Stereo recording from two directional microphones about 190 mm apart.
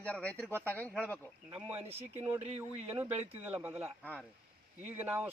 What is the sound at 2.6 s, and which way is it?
Speech, 10° right (ahead or behind).